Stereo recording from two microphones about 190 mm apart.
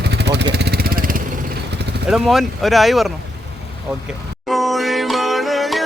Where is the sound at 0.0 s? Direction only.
60° right (ahead or behind).